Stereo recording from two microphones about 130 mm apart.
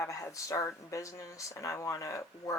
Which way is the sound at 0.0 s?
25° left (ahead or behind).